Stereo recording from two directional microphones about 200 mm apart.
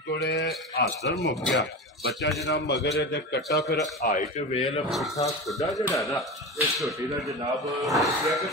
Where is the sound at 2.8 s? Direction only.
55° left (ahead or behind).